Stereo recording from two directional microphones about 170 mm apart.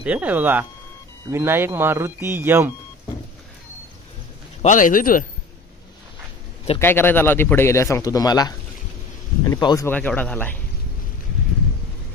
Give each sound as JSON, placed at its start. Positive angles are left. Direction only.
{"t": 0.0, "sound": "speech", "side_deg": -10}
{"t": 4.6, "sound": "speech", "side_deg": 50}
{"t": 6.8, "sound": "speech", "side_deg": 10}
{"t": 9.8, "sound": "speech", "side_deg": 10}